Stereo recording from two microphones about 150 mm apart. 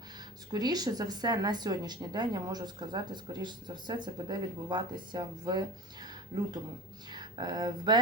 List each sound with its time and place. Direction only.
0.5 s speech: 25° right (ahead or behind)